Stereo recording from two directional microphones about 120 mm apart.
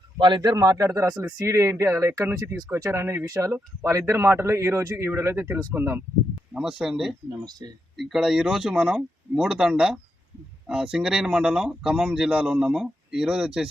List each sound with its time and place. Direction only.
0.2 s a man's voice: 40° right (ahead or behind)
1.2 s speech: 20° right (ahead or behind)
6.5 s speech: 5° right (ahead or behind)
7.3 s a man's voice: 35° right (ahead or behind)
7.9 s speech: centre (ahead or behind)